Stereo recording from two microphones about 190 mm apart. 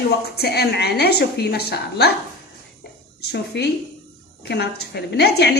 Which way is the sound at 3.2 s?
60° left (ahead or behind).